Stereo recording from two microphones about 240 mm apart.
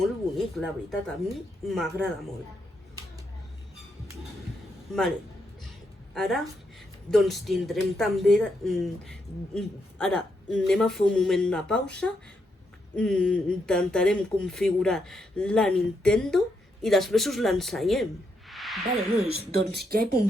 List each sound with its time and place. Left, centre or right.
0.0 s speech: centre
4.9 s speech: centre
6.1 s speech: centre
19.8 s speech: right